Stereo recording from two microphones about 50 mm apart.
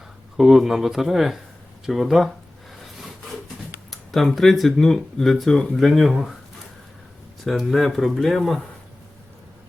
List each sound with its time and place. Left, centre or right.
0.3 s speech: centre
2.8 s wood: centre
4.1 s speech: centre
7.4 s speech: centre